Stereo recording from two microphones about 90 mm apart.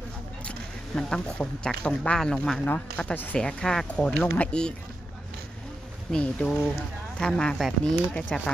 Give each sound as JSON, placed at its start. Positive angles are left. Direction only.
{"t": 0.5, "sound": "speech", "side_deg": 10}
{"t": 6.1, "sound": "speech", "side_deg": 10}